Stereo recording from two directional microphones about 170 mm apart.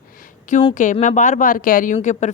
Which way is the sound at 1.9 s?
45° left (ahead or behind).